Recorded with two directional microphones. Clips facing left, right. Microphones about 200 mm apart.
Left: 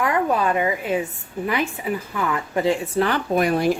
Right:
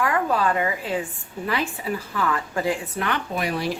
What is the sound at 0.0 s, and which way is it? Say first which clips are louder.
Speech: left 2 dB; 20° left (ahead or behind).